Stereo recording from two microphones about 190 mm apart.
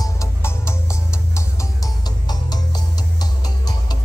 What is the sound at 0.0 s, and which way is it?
Music, 15° left (ahead or behind).